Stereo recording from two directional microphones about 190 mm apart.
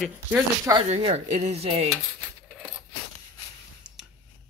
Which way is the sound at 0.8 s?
30° right (ahead or behind).